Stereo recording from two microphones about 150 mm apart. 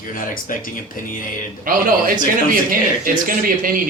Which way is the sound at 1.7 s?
65° right (ahead or behind).